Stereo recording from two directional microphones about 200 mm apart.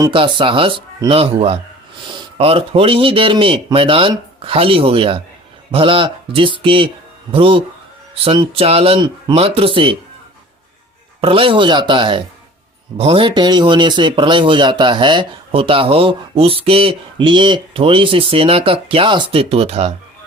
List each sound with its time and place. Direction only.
0.0 s a man's voice: 25° right (ahead or behind)
11.2 s speech: 25° right (ahead or behind)